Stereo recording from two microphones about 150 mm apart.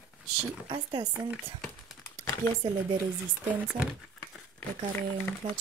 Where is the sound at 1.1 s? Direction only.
5° right (ahead or behind).